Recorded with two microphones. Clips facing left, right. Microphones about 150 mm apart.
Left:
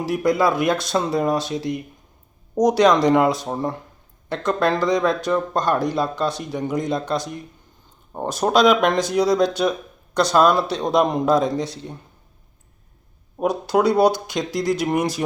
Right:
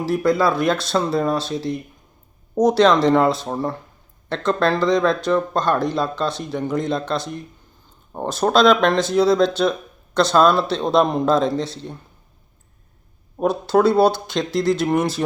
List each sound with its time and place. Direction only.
0.0 s speech: 15° left (ahead or behind)
13.4 s speech: 15° left (ahead or behind)